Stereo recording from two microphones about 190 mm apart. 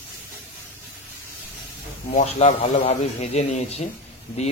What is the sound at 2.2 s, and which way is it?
A man's voice, 40° left (ahead or behind).